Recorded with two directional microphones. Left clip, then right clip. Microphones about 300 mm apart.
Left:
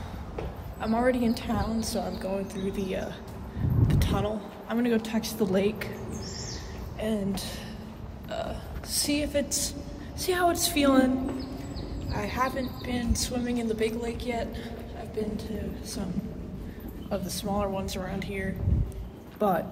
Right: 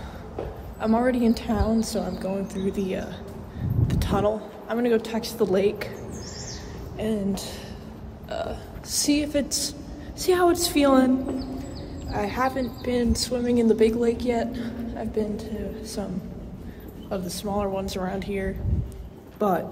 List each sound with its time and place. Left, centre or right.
0.7 s a woman's voice: centre
7.0 s a woman's voice: centre
8.3 s a sound: centre
9.0 s a woman's voice: centre
12.1 s a woman's voice: centre
17.1 s a woman's voice: centre